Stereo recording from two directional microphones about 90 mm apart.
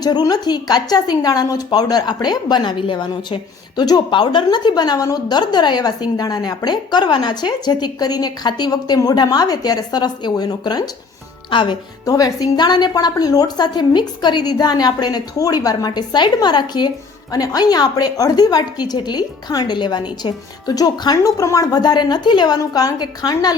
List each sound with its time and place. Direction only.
0.0 s a woman's voice: 50° left (ahead or behind)
11.5 s speech: 65° left (ahead or behind)
12.0 s a woman's voice: 40° left (ahead or behind)